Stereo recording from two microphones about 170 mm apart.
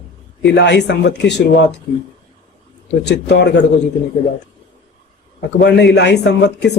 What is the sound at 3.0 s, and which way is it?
Speech, 90° left.